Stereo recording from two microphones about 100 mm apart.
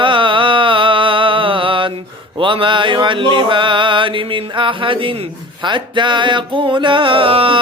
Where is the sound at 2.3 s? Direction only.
60° right (ahead or behind).